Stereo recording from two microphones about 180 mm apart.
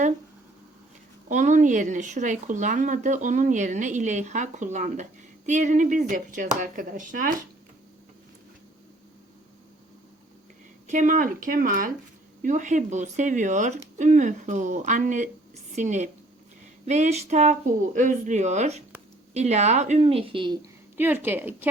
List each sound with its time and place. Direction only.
1.3 s speech: 45° right (ahead or behind)
10.8 s a woman's voice: 45° right (ahead or behind); by 20.6 s 30° right (ahead or behind)
20.9 s a woman's voice: 10° right (ahead or behind)